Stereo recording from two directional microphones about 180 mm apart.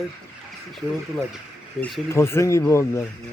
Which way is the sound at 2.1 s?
15° left (ahead or behind).